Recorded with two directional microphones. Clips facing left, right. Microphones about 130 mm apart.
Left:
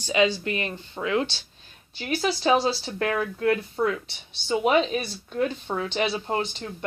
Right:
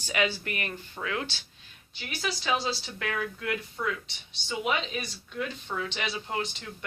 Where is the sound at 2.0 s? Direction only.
40° left (ahead or behind).